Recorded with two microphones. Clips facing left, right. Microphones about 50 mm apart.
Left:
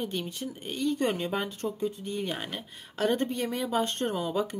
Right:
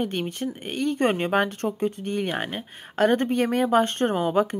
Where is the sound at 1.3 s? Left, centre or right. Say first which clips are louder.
Right 8 dB; right.